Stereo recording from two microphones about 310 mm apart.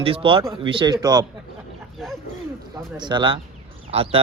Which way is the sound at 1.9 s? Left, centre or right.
Centre.